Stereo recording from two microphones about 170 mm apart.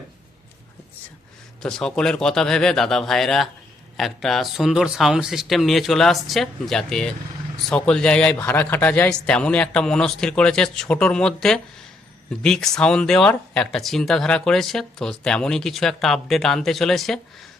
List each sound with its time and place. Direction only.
1.6 s speech: 5° left (ahead or behind)